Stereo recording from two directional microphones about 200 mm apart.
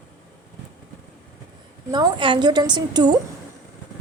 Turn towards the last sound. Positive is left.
turn(degrees=-20)  # may be behind; listen again after turning